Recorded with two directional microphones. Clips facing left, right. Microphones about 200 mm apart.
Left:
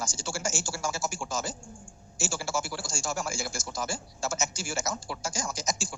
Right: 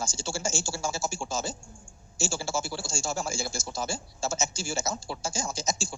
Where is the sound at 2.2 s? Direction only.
25° right (ahead or behind).